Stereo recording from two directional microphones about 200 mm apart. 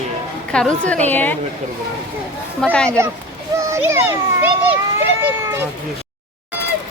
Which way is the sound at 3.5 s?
15° right (ahead or behind).